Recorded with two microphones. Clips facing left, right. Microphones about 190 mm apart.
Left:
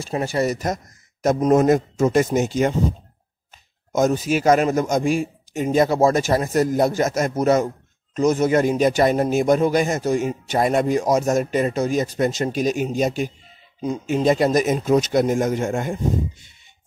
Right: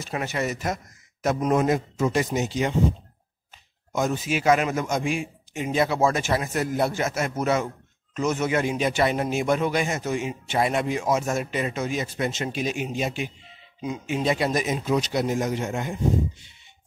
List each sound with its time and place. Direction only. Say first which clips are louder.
0.0 s a man's voice: left 6 dB; 30° left (ahead or behind); by 2.7 s 45° left (ahead or behind)
3.9 s a man's voice: left 6 dB; 40° left (ahead or behind)